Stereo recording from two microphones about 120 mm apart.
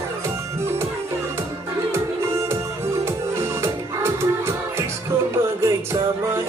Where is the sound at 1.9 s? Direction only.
25° right (ahead or behind).